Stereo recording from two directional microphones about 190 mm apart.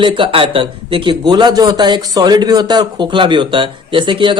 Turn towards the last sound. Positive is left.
turn(degrees=-25)  # may be behind; listen again after turning